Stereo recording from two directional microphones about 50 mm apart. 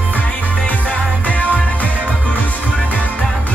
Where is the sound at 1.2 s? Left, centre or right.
Left.